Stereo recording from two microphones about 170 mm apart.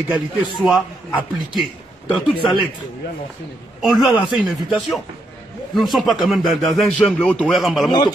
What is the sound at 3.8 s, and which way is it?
Speech, centre (ahead or behind).